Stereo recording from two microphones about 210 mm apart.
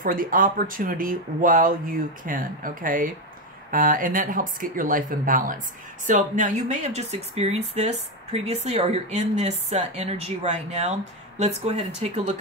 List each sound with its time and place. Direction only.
0.0 s speech: 40° right (ahead or behind)